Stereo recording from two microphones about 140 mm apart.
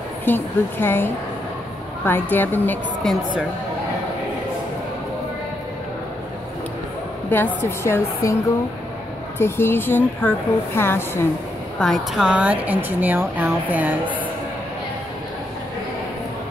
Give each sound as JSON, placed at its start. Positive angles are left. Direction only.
{"t": 0.2, "sound": "a woman's voice", "side_deg": 15}
{"t": 7.2, "sound": "a woman's voice", "side_deg": 15}
{"t": 9.4, "sound": "a woman's voice", "side_deg": 15}
{"t": 11.8, "sound": "speech", "side_deg": 0}